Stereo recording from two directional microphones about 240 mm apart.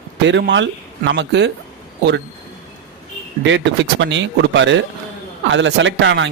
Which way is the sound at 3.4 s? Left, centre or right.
Right.